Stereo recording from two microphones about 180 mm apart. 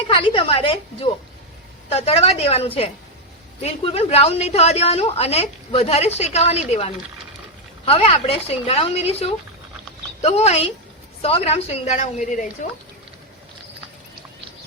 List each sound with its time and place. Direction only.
0.1 s a woman's voice: 30° left (ahead or behind); by 12.5 s 45° left (ahead or behind)